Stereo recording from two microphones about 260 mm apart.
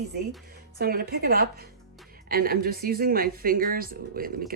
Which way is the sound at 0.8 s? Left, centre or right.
Right.